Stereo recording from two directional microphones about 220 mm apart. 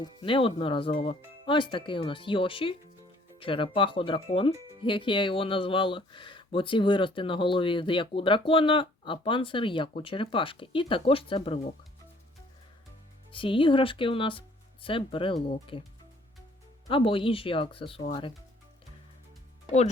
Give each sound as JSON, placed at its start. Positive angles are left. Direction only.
{"t": 0.0, "sound": "speech", "side_deg": 25}
{"t": 13.3, "sound": "speech", "side_deg": 25}
{"t": 16.9, "sound": "speech", "side_deg": 25}